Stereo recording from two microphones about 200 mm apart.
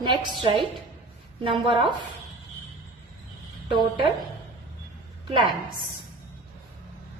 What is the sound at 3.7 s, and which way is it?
Speech, 25° right (ahead or behind).